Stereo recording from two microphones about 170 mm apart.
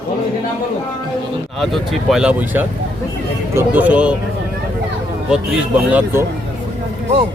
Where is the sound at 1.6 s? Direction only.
Centre (ahead or behind).